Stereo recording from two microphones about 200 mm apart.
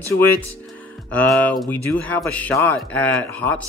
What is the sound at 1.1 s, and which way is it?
Speech, 5° left (ahead or behind).